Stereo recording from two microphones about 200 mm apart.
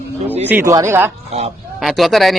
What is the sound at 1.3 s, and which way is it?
Speech, 35° right (ahead or behind).